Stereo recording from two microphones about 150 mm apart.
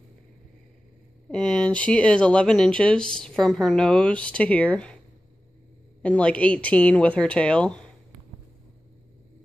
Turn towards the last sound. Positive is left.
turn(degrees=5)  # may be behind; listen again after turning